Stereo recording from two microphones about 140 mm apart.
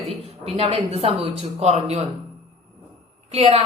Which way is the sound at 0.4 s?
40° right (ahead or behind).